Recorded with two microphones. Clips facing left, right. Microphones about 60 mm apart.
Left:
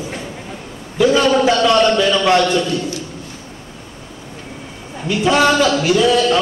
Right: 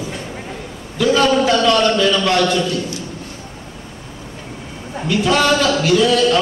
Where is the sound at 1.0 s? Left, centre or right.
Centre.